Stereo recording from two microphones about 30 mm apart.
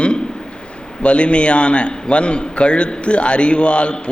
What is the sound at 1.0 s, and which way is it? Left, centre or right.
A man's voice, left.